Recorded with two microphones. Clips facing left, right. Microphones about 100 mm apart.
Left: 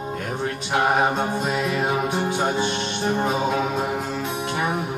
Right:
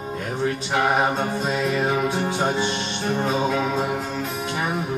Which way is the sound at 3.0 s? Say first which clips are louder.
Even; 15° left (ahead or behind).